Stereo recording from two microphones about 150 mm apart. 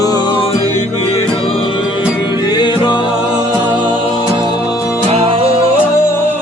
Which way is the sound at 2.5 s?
30° left (ahead or behind).